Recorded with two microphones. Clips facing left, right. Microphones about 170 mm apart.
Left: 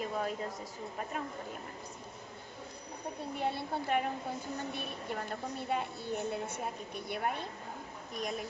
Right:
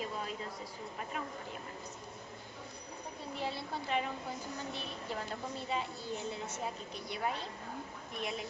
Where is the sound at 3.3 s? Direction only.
55° left (ahead or behind).